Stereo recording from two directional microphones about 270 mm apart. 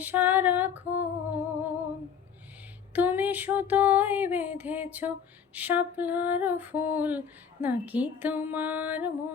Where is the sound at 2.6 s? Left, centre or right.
Centre.